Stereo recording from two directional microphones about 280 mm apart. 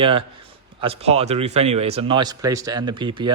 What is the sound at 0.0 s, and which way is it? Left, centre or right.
A man's voice, centre.